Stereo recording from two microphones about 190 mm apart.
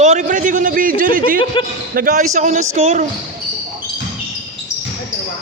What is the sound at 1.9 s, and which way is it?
Speech, 40° right (ahead or behind).